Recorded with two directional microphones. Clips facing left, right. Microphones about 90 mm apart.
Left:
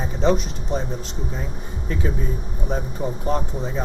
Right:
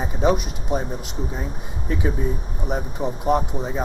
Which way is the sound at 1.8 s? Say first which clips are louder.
Right 2 dB; 10° right (ahead or behind).